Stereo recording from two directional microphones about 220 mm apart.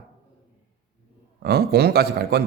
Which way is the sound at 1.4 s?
45° right (ahead or behind).